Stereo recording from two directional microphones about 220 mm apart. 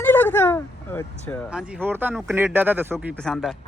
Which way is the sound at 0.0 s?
10° left (ahead or behind).